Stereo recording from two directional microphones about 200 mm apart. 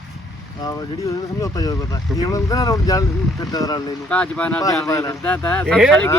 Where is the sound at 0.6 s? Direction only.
20° left (ahead or behind).